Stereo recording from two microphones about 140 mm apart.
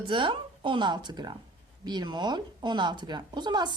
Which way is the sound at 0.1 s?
35° right (ahead or behind).